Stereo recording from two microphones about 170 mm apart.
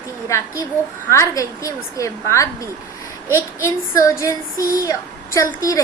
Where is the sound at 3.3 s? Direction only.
15° left (ahead or behind).